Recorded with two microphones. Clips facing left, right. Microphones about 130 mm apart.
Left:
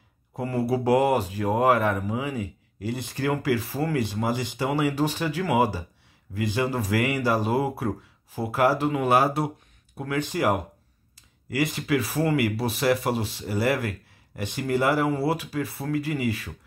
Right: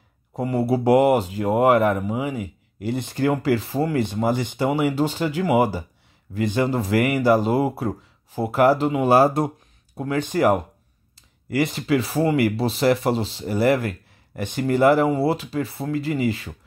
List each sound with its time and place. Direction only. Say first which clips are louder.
0.4 s speech: right 4 dB; 25° right (ahead or behind)
4.3 s speech: right 5 dB; 55° right (ahead or behind)
4.6 s speech: right 2 dB; 25° right (ahead or behind)
9.1 s speech: right 6 dB; 40° right (ahead or behind)
9.9 s speech: right 5 dB; 25° right (ahead or behind)